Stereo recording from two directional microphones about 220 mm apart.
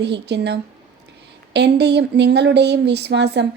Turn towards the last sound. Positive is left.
turn(degrees=-50)  # may be behind; listen again after turning